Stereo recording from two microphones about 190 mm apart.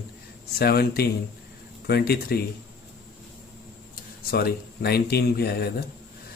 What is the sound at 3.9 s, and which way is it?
Speech, 50° left (ahead or behind).